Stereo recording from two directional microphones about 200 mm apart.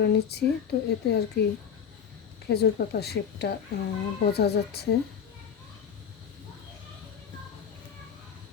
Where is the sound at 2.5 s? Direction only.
55° left (ahead or behind).